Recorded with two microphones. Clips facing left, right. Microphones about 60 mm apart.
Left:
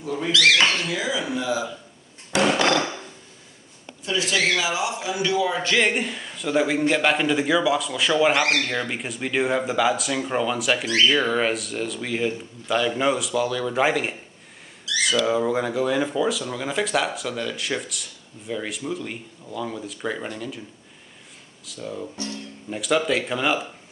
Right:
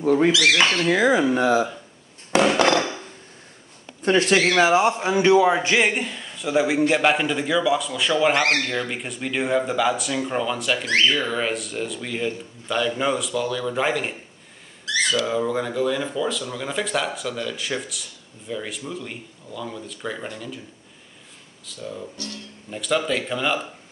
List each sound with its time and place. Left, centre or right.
0.0 s speech: right
0.8 s a man's voice: right
2.3 s dishes: right
4.0 s a man's voice: right
5.6 s a man's voice: right
5.9 s speech: centre
11.1 s speech: left
11.3 s speech: centre
21.7 s speech: centre
22.1 s speech: left
22.7 s speech: centre